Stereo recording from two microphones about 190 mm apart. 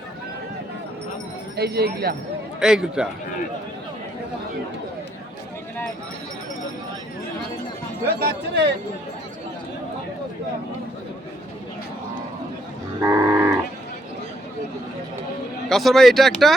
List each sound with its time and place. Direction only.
1.5 s speech: 55° right (ahead or behind)
2.6 s speech: 5° right (ahead or behind)
8.0 s speech: 55° right (ahead or behind)
13.0 s livestock: 15° right (ahead or behind)
15.7 s speech: centre (ahead or behind)